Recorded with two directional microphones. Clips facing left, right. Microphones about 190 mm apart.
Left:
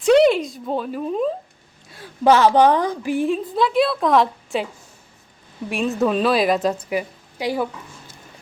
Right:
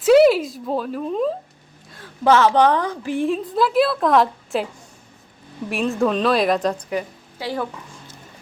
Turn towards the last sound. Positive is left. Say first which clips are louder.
# left 3 dB
turn(degrees=10)  # may be behind; listen again after turning